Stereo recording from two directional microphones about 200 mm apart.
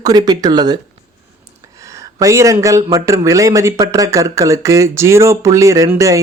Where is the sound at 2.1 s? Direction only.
15° right (ahead or behind).